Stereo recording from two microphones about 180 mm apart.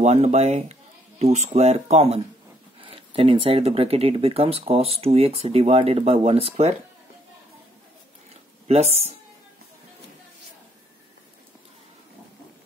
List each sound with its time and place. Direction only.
0.0 s speech: 35° right (ahead or behind)
8.6 s speech: 35° right (ahead or behind)